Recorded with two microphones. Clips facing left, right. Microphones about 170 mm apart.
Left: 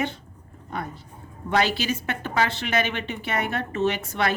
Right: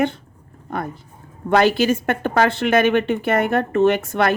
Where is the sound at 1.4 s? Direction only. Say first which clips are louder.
Right 8 dB; 50° right (ahead or behind).